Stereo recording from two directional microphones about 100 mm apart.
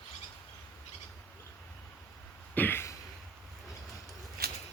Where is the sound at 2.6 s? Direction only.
20° left (ahead or behind).